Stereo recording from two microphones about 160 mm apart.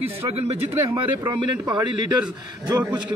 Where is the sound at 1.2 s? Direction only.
20° right (ahead or behind).